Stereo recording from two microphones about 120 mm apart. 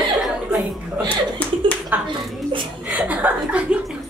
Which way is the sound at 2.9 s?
15° right (ahead or behind).